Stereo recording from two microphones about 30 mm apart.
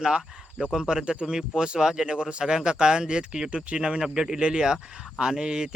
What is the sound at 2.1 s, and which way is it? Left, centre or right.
Speech, right.